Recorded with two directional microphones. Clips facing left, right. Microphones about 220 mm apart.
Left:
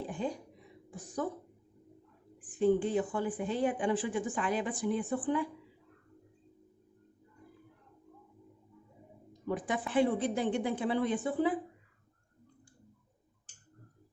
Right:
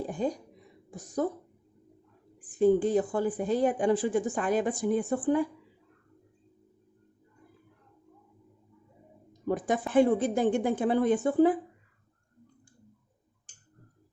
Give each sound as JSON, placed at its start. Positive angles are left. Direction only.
{"t": 0.0, "sound": "a sound", "side_deg": -40}
{"t": 0.9, "sound": "a woman's voice", "side_deg": -40}
{"t": 2.5, "sound": "speech", "side_deg": -40}
{"t": 9.5, "sound": "speech", "side_deg": -45}